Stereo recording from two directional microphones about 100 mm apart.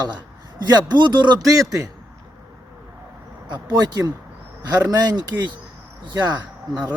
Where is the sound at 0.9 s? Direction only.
45° right (ahead or behind).